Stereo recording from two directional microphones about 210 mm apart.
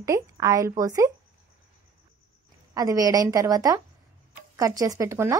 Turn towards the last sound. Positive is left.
turn(degrees=-15)  # may be behind; listen again after turning